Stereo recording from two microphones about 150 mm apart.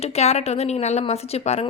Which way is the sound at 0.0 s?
45° left (ahead or behind).